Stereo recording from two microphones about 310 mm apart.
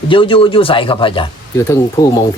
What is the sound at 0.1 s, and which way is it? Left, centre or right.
Speech, centre.